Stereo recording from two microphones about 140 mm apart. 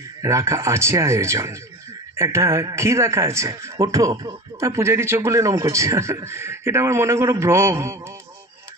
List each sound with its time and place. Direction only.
0.2 s a man's voice: 20° right (ahead or behind)